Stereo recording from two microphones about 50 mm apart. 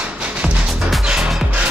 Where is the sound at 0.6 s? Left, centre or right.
Centre.